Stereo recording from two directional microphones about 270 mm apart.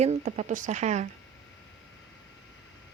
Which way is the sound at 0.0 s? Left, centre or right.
Right.